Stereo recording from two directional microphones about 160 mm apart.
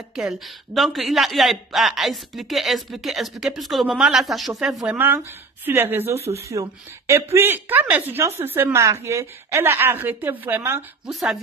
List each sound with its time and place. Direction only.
0.1 s a woman's voice: 5° right (ahead or behind)
11.1 s speech: centre (ahead or behind)